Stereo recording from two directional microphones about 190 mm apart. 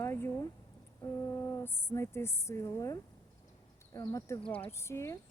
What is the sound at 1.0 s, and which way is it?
Speech, 15° left (ahead or behind).